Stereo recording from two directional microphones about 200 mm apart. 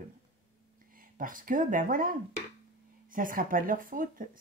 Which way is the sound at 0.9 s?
45° right (ahead or behind).